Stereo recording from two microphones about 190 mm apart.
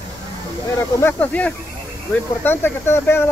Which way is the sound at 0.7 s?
10° left (ahead or behind).